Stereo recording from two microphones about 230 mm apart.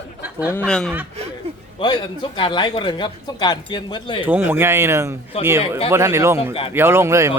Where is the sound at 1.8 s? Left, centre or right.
Centre.